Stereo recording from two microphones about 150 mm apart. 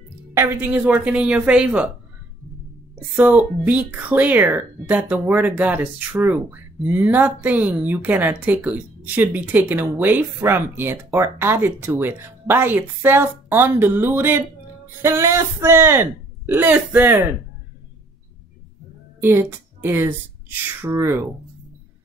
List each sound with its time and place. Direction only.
0.3 s speech: 15° right (ahead or behind)
3.2 s speech: 10° right (ahead or behind)
19.2 s speech: 15° right (ahead or behind)